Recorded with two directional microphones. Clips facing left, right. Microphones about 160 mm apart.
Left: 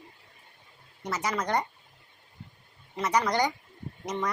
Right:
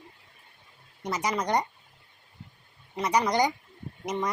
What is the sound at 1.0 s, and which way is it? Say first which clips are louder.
Speech: right 2 dB; 15° right (ahead or behind).